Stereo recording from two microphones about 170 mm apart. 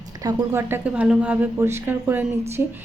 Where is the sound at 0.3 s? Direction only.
15° right (ahead or behind).